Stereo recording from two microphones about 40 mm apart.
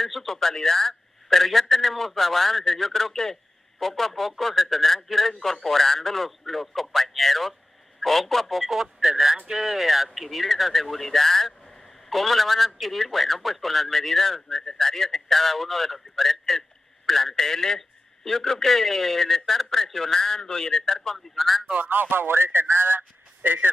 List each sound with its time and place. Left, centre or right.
0.0 s a man's voice: centre
8.6 s a man's voice: centre
21.4 s speech: centre
21.7 s speech: right
22.1 s speech: right